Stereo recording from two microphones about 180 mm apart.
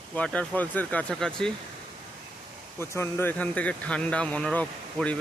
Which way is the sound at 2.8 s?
15° left (ahead or behind).